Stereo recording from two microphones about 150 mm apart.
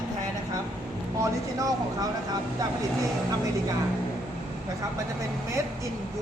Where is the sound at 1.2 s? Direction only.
20° right (ahead or behind).